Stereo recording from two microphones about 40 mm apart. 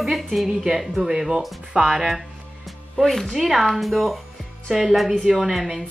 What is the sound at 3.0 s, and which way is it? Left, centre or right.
Speech, centre.